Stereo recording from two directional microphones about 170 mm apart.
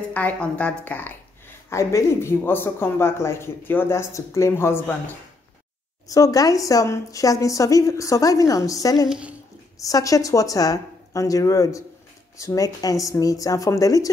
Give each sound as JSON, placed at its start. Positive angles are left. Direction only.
{"t": 0.1, "sound": "speech", "side_deg": 10}
{"t": 6.0, "sound": "a woman's voice", "side_deg": 20}